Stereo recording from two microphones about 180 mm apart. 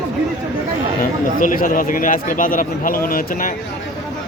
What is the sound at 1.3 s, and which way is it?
A man's voice, 50° left (ahead or behind).